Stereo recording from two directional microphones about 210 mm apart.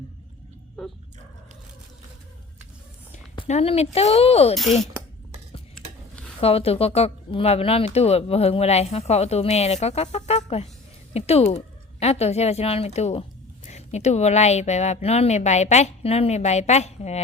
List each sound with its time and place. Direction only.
0.8 s a sound: centre (ahead or behind)
3.4 s speech: 30° left (ahead or behind)
4.5 s speech: centre (ahead or behind)
6.4 s a woman's voice: 30° left (ahead or behind)